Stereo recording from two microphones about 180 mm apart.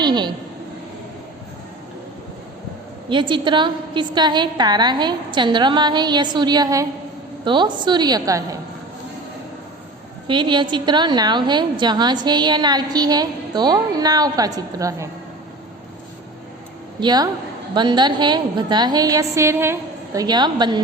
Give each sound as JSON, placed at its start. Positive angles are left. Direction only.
{"t": 0.0, "sound": "a woman's voice", "side_deg": -25}
{"t": 3.1, "sound": "a woman's voice", "side_deg": -25}
{"t": 10.2, "sound": "a woman's voice", "side_deg": -25}
{"t": 17.0, "sound": "a woman's voice", "side_deg": -25}